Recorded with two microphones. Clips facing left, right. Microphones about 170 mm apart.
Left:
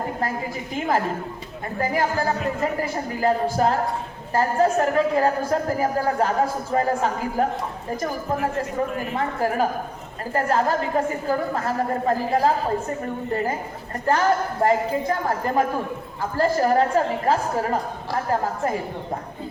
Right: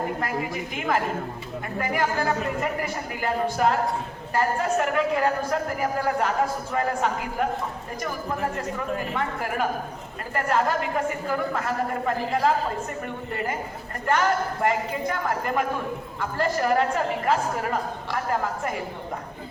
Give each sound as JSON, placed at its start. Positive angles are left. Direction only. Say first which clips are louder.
{"t": 1.8, "sound": "speech", "louder": "left 3 dB", "side_deg": 30}
{"t": 9.1, "sound": "speech", "louder": "left 4 dB", "side_deg": 35}
{"t": 14.1, "sound": "speech", "louder": "left 3 dB", "side_deg": 30}